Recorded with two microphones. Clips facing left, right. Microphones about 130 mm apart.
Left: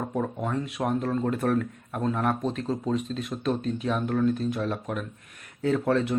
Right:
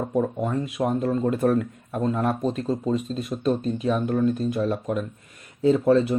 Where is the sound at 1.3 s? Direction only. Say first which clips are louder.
Right 4 dB; 10° right (ahead or behind).